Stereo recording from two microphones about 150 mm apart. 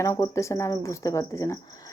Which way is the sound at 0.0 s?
20° left (ahead or behind).